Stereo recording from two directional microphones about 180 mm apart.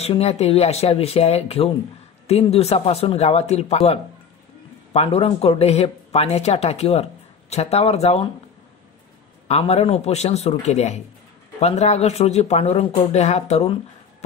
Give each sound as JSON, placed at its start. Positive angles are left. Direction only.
{"t": 0.0, "sound": "speech", "side_deg": 35}
{"t": 9.5, "sound": "speech", "side_deg": 35}